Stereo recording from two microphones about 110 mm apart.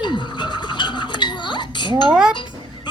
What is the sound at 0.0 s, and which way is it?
Music, 45° left (ahead or behind).